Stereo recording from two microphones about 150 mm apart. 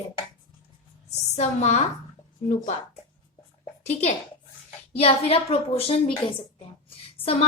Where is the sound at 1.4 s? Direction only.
50° left (ahead or behind).